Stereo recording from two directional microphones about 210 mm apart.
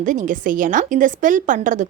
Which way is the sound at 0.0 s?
40° right (ahead or behind).